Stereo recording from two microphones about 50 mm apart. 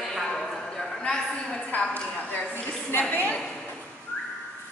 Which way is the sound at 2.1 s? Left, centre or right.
Left.